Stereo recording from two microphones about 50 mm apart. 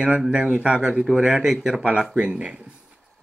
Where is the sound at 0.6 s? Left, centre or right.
Right.